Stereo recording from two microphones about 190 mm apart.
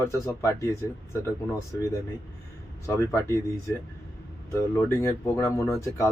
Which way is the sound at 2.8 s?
15° left (ahead or behind).